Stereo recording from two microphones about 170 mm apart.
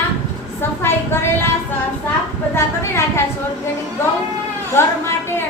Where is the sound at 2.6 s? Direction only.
15° left (ahead or behind).